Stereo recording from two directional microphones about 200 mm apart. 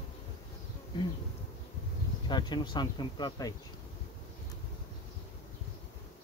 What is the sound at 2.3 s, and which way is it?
Speech, 20° left (ahead or behind).